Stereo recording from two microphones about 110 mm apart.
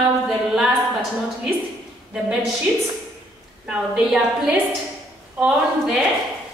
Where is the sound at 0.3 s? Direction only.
5° right (ahead or behind).